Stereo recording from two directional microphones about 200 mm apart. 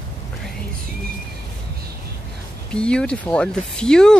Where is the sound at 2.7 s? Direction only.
5° left (ahead or behind).